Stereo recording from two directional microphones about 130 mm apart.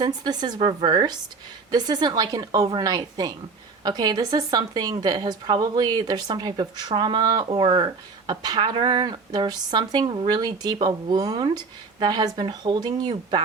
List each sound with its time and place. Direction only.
0.0 s speech: 30° right (ahead or behind)